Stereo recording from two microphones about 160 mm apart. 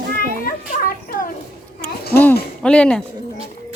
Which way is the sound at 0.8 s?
65° left (ahead or behind).